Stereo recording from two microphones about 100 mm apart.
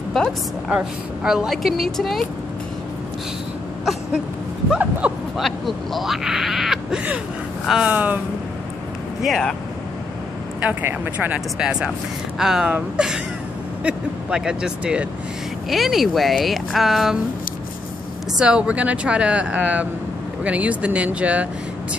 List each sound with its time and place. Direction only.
0.7 s a woman's voice: 10° right (ahead or behind)
4.6 s speech: 10° right (ahead or behind)
5.4 s a woman's voice: centre (ahead or behind)
7.9 s speech: 15° right (ahead or behind)
9.2 s a woman's voice: 5° left (ahead or behind)
10.6 s a woman's voice: 20° right (ahead or behind); by 17.2 s 5° right (ahead or behind)
18.4 s speech: 10° right (ahead or behind)